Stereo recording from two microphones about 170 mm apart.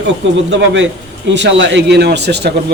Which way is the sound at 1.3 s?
90° right.